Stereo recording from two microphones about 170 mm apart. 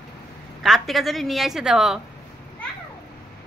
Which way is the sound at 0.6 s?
Centre (ahead or behind).